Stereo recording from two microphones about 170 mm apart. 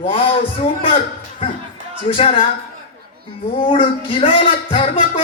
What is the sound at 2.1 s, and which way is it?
Speech, 30° left (ahead or behind).